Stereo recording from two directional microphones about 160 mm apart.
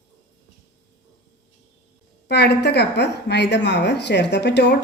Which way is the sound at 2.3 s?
90° left.